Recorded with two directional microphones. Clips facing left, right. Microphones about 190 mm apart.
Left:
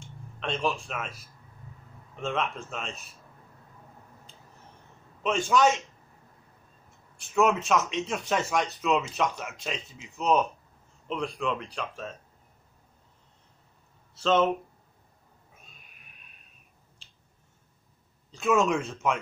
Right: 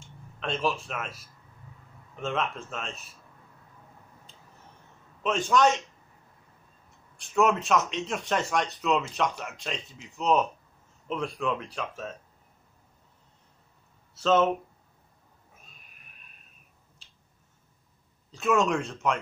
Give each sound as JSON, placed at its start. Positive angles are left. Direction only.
{"t": 0.0, "sound": "speech", "side_deg": 0}
{"t": 5.2, "sound": "speech", "side_deg": 0}
{"t": 7.2, "sound": "speech", "side_deg": 0}
{"t": 14.1, "sound": "speech", "side_deg": 0}
{"t": 18.3, "sound": "speech", "side_deg": 0}